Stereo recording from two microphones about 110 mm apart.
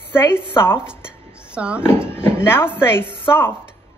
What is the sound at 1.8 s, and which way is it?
Speech, 20° left (ahead or behind).